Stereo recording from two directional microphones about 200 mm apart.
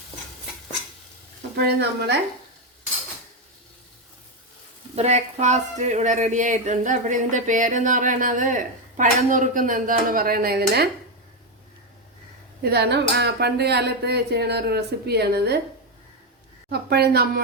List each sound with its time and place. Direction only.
1.5 s speech: 55° right (ahead or behind)
4.9 s speech: 35° right (ahead or behind); by 10.8 s 50° right (ahead or behind)
12.6 s speech: 55° right (ahead or behind)
16.6 s speech: 55° right (ahead or behind)